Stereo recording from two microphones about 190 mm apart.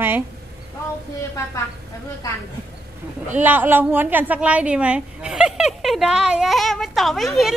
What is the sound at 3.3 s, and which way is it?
A woman's voice, 10° right (ahead or behind).